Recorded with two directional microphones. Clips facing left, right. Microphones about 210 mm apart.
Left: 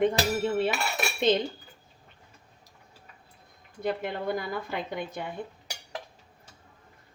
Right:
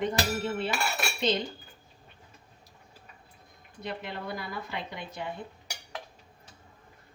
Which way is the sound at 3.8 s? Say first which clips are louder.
Left 7 dB; 50° left (ahead or behind).